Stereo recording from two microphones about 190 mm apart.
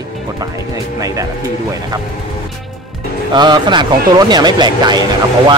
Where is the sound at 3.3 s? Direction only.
25° right (ahead or behind).